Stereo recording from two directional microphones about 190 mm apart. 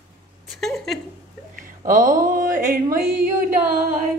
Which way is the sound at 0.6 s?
Centre (ahead or behind).